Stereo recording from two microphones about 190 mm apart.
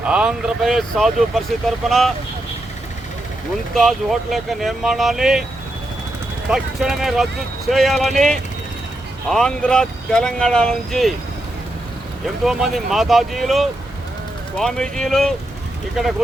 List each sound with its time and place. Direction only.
0.0 s speech: 5° right (ahead or behind)
3.8 s speech: centre (ahead or behind)
6.5 s speech: 5° right (ahead or behind)
12.5 s speech: centre (ahead or behind)